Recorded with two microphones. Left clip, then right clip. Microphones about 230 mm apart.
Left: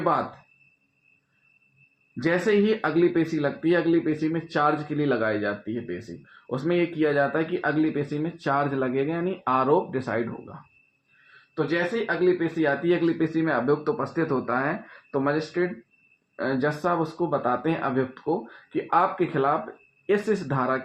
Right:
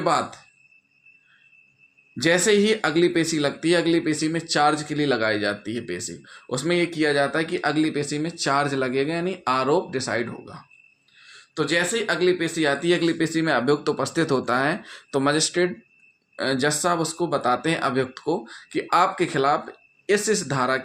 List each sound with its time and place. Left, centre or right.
2.2 s speech: right
11.5 s speech: right
16.3 s speech: right